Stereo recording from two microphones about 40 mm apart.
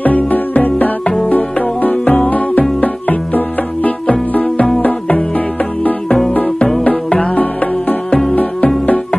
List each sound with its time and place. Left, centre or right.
0.0 s music: left
6.8 s music: left